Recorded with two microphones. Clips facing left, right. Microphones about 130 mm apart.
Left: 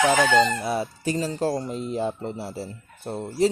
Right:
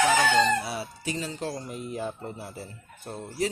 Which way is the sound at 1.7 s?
25° left (ahead or behind).